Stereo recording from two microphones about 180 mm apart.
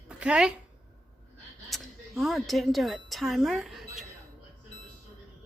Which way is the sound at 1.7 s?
Centre (ahead or behind).